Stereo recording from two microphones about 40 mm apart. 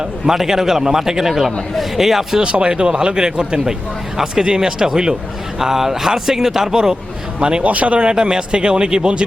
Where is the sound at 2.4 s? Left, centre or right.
Right.